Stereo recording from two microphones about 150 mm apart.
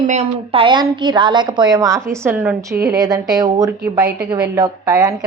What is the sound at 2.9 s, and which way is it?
A woman's voice, 25° right (ahead or behind).